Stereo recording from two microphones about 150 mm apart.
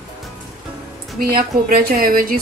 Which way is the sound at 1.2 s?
80° right.